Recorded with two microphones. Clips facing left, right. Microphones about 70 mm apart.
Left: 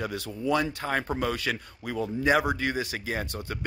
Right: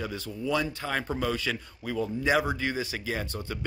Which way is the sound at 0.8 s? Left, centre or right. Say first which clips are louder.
Left 2 dB; left.